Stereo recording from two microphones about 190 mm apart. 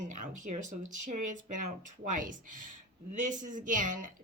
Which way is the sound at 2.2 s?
45° right (ahead or behind).